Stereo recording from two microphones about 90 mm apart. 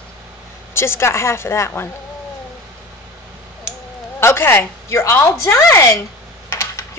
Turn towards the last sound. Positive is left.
turn(degrees=30)  # may be behind; listen again after turning